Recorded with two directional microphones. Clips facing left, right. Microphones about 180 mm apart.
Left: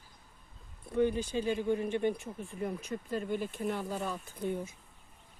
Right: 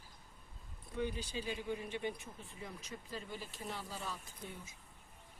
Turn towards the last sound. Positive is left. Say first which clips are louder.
# left 15 dB
turn(degrees=60)  # may be behind; listen again after turning